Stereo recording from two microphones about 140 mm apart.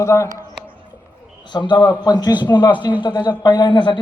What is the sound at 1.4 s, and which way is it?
A man's voice, 35° left (ahead or behind).